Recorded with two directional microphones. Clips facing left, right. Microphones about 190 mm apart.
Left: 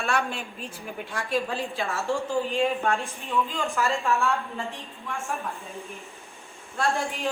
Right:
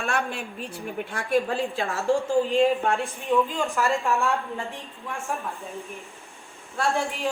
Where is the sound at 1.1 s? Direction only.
55° right (ahead or behind).